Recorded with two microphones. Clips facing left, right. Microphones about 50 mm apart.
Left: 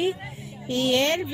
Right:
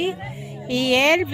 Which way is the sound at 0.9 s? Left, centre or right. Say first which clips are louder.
Right 8 dB; right.